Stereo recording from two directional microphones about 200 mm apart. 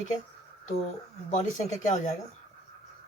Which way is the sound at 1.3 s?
35° left (ahead or behind).